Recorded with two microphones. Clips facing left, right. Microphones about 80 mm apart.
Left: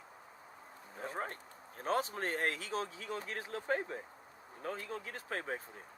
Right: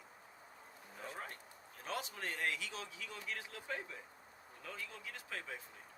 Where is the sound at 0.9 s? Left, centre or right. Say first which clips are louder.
Left 7 dB; left.